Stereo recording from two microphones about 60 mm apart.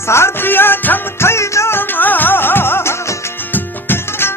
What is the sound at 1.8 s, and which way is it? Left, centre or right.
Music, left.